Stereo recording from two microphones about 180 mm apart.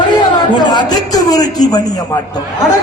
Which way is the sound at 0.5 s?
25° left (ahead or behind).